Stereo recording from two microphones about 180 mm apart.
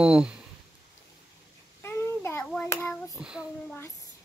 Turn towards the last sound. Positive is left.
turn(degrees=-5)  # may be behind; listen again after turning